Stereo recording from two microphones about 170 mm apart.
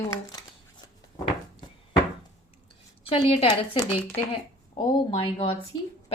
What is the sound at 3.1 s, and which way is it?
Speech, 35° left (ahead or behind).